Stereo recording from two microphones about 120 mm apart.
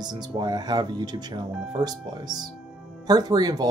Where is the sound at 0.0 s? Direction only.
35° right (ahead or behind).